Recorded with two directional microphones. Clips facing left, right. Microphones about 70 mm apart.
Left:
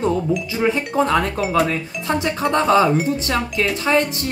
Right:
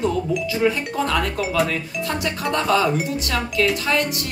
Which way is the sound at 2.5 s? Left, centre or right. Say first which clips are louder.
Left 4 dB; left.